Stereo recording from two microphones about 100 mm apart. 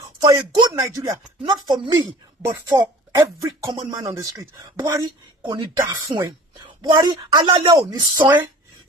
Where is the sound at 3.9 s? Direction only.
35° right (ahead or behind).